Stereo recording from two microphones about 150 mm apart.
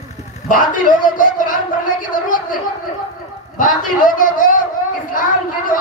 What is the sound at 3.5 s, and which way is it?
Speech, 65° left (ahead or behind).